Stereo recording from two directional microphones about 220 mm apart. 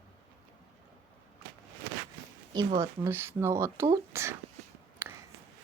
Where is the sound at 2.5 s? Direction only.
15° right (ahead or behind).